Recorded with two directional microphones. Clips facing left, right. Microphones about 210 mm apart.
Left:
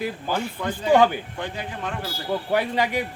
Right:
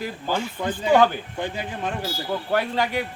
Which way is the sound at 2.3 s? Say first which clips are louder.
Left 2 dB; 15° left (ahead or behind).